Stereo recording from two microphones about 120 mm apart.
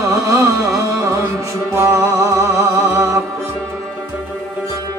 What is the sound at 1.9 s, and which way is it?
Speech, 25° right (ahead or behind).